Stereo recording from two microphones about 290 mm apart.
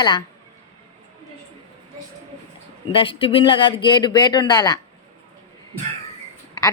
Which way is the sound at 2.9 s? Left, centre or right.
Centre.